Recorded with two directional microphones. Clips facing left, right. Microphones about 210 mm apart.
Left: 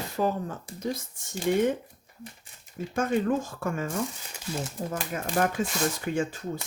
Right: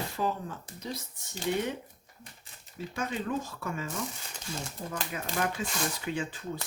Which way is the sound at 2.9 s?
50° left (ahead or behind).